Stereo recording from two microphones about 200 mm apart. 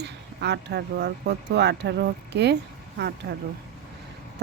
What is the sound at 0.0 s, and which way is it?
Speech, 60° right (ahead or behind).